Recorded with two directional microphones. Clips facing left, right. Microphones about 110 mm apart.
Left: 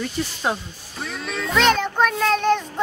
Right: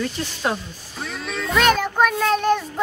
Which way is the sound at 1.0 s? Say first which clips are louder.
Even; centre (ahead or behind).